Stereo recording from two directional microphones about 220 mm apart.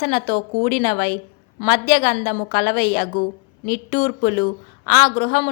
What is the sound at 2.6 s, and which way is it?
Speech, 25° left (ahead or behind).